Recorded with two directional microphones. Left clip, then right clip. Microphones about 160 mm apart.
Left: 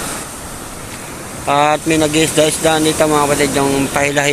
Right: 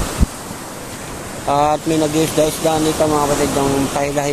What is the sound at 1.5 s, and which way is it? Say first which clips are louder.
Speech: left 3 dB; centre (ahead or behind).